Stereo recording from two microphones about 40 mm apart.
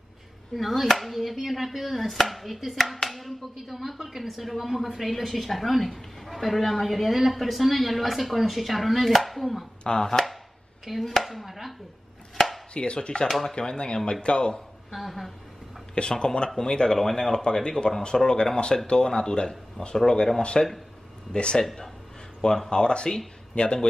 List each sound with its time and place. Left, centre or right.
0.6 s speech: centre
9.8 s speech: centre
12.7 s speech: left
13.3 s speech: centre
13.6 s speech: left
14.9 s speech: centre
15.9 s speech: left
21.6 s speech: centre; by 23.9 s left